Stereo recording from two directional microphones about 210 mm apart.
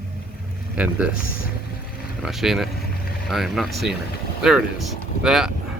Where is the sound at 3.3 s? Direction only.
Centre (ahead or behind).